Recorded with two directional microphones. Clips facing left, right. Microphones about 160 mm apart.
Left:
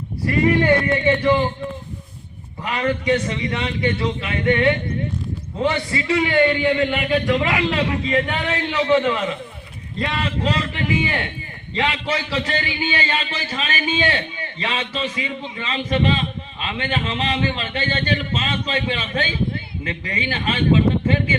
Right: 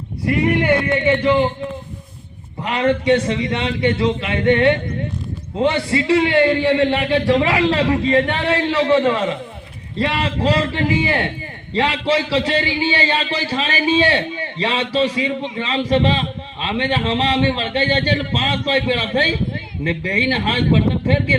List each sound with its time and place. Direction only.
2.6 s a man's voice: 25° right (ahead or behind)